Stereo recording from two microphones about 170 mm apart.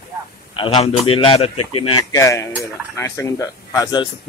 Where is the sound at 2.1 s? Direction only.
20° left (ahead or behind).